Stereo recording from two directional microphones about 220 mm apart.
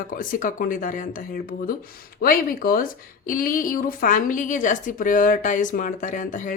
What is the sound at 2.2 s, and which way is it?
Speech, 40° left (ahead or behind).